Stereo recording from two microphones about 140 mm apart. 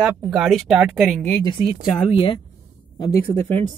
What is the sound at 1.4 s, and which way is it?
A woman's voice, 30° left (ahead or behind).